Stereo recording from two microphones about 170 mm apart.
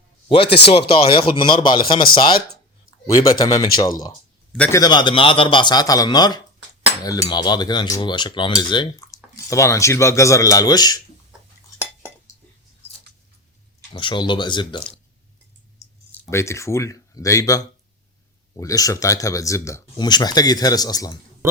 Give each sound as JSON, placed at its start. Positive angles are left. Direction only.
{"t": 0.4, "sound": "speech", "side_deg": 80}
{"t": 0.7, "sound": "cutlery", "side_deg": 30}
{"t": 3.2, "sound": "cutlery", "side_deg": 20}
{"t": 13.9, "sound": "cutlery", "side_deg": 30}
{"t": 15.8, "sound": "speech", "side_deg": 15}
{"t": 18.5, "sound": "cutlery", "side_deg": 20}
{"t": 21.4, "sound": "speech", "side_deg": -15}